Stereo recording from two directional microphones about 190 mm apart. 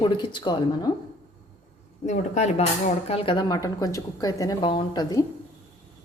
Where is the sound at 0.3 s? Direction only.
25° left (ahead or behind).